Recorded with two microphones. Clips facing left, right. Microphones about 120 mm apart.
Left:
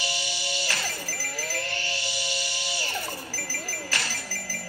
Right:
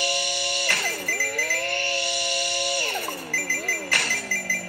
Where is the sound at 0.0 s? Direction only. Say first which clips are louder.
Right 6 dB; 55° right (ahead or behind).